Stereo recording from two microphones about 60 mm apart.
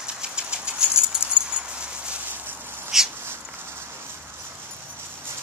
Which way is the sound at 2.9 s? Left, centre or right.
Centre.